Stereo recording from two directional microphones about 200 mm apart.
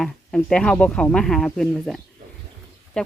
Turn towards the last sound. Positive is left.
turn(degrees=5)  # may be behind; listen again after turning